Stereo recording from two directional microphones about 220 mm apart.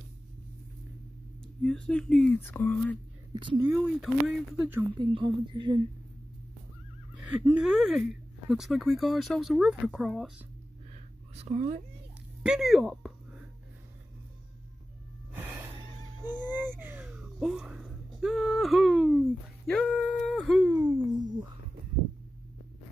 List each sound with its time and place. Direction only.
1.6 s speech: 5° left (ahead or behind)
3.5 s speech: 10° right (ahead or behind)
4.9 s speech: 20° right (ahead or behind)
7.2 s speech: 5° right (ahead or behind)
11.3 s speech: 30° right (ahead or behind)
12.4 s speech: centre (ahead or behind)
16.3 s a sound: 10° right (ahead or behind)
20.7 s a sound: 15° right (ahead or behind)